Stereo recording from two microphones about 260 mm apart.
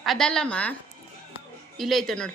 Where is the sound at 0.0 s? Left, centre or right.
Centre.